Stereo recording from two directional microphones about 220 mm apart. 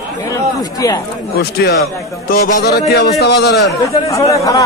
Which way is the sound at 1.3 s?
45° left (ahead or behind).